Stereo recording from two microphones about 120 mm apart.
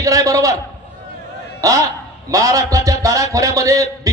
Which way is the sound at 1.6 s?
30° right (ahead or behind).